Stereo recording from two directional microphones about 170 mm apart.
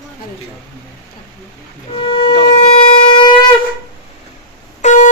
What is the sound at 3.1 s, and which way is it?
Shofar, 30° left (ahead or behind).